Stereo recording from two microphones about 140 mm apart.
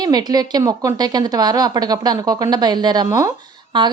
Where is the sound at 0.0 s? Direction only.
30° right (ahead or behind).